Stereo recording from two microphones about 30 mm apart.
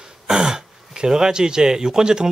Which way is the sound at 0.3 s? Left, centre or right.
Right.